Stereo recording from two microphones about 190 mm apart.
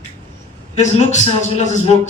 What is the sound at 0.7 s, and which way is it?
A man's voice, 40° left (ahead or behind).